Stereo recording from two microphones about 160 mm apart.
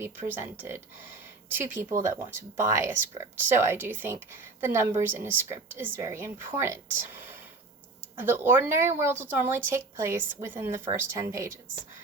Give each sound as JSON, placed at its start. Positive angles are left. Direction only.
{"t": 0.0, "sound": "speech", "side_deg": -10}